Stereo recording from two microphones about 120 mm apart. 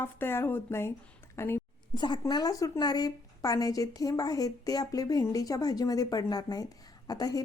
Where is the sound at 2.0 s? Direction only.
35° left (ahead or behind).